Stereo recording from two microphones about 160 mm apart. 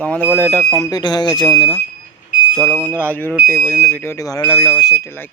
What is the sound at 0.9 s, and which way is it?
Speech, 25° left (ahead or behind).